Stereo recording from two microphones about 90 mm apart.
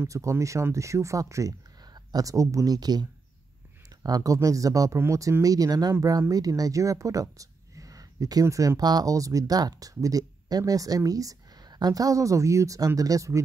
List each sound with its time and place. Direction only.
0.0 s speech: 35° right (ahead or behind)